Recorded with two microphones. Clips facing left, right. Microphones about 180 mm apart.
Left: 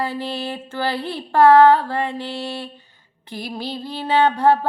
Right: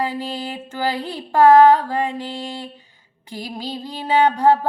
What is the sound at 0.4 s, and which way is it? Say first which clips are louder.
Female singing: even; 10° right (ahead or behind).